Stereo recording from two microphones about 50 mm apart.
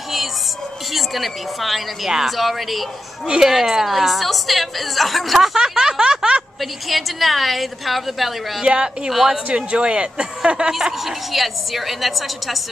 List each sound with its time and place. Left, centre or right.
0.9 s a woman's voice: centre
6.6 s a woman's voice: centre
8.6 s speech: centre
9.1 s a woman's voice: centre
9.5 s speech: right
10.7 s a woman's voice: centre